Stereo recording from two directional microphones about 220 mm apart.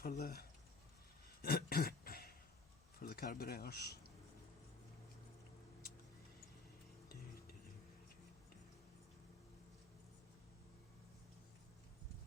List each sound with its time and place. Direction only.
0.0 s speech: 35° left (ahead or behind)
1.4 s throat clearing: 45° left (ahead or behind)
3.0 s speech: 45° left (ahead or behind)